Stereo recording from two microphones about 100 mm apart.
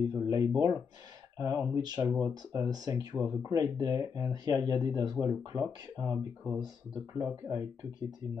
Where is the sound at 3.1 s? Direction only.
25° right (ahead or behind).